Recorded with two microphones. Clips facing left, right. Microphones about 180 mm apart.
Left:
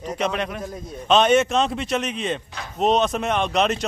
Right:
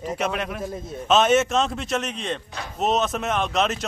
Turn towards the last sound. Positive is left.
turn(degrees=0)  # may be behind; listen again after turning